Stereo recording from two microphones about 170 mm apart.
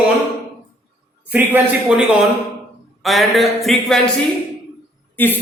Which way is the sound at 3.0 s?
Centre (ahead or behind).